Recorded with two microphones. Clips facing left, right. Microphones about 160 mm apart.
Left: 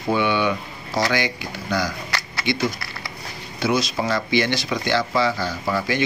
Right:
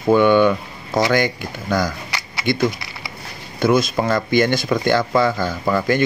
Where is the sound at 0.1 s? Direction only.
50° right (ahead or behind).